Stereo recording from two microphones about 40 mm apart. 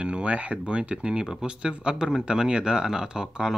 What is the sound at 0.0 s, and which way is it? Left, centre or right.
Speech, right.